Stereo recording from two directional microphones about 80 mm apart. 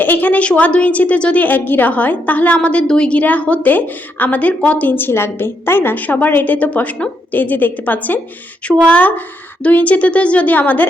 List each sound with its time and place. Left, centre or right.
0.0 s a woman's voice: left